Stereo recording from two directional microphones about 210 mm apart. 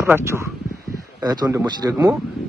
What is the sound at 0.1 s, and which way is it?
Speech, 15° right (ahead or behind).